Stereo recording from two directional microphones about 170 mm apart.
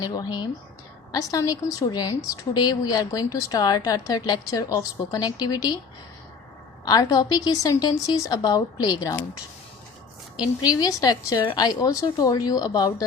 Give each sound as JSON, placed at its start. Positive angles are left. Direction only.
{"t": 0.0, "sound": "a woman's voice", "side_deg": 20}
{"t": 6.8, "sound": "a woman's voice", "side_deg": 20}
{"t": 10.6, "sound": "a woman's voice", "side_deg": 20}